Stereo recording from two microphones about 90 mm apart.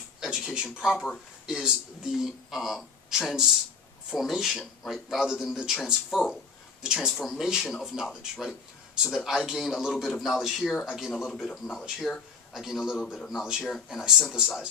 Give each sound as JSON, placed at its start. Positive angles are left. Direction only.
{"t": 0.2, "sound": "speech", "side_deg": -10}
{"t": 0.9, "sound": "speech", "side_deg": 15}
{"t": 1.5, "sound": "a man's voice", "side_deg": -5}